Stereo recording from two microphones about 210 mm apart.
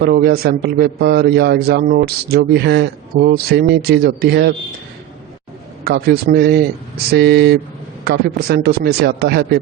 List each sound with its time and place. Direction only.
0.0 s a man's voice: 50° right (ahead or behind)
5.8 s a man's voice: 50° right (ahead or behind)